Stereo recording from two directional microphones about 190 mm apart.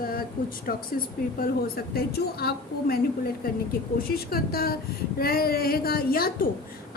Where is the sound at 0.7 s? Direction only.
50° left (ahead or behind).